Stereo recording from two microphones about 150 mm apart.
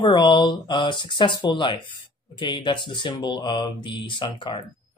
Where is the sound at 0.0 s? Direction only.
30° left (ahead or behind).